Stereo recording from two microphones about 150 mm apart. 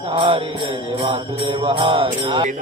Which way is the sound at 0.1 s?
35° right (ahead or behind).